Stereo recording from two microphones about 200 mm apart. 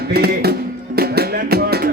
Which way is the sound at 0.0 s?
50° right (ahead or behind).